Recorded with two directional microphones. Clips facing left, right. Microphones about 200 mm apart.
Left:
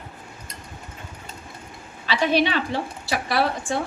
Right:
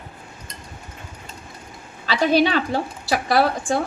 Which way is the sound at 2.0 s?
40° right (ahead or behind).